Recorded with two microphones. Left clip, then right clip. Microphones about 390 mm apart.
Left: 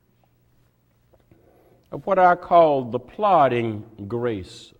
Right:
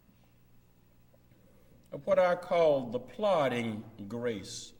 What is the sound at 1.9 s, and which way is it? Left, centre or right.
Speech, left.